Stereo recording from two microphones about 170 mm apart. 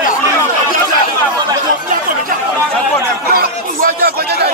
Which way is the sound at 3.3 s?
60° right (ahead or behind).